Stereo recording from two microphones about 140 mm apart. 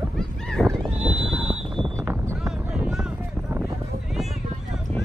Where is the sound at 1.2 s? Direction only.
5° right (ahead or behind).